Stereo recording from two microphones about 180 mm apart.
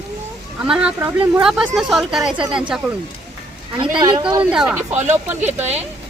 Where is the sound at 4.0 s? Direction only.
25° right (ahead or behind).